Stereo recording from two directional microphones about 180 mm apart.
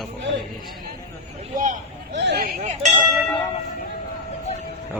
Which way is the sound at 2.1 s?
70° right (ahead or behind).